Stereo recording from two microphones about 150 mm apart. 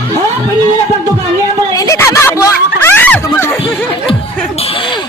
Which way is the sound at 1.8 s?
20° left (ahead or behind).